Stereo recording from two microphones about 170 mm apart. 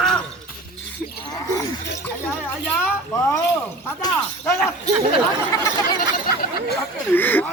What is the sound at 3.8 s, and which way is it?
Speech, 15° left (ahead or behind).